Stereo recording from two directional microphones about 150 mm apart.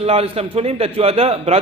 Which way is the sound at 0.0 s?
40° right (ahead or behind).